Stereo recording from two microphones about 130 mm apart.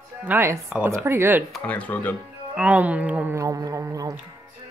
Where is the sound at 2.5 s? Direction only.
10° right (ahead or behind).